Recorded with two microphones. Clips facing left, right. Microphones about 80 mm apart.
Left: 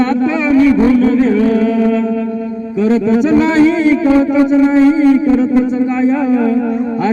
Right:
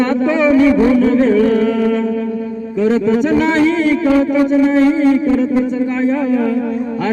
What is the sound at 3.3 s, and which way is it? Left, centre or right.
Music, centre.